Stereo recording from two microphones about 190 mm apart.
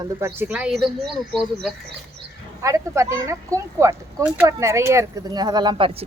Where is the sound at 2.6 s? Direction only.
15° right (ahead or behind).